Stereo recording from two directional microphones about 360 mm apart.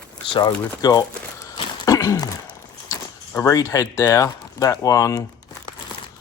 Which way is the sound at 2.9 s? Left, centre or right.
Centre.